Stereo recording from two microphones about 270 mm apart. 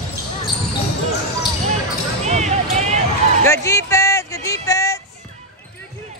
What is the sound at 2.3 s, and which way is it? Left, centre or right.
Basketball bounce, right.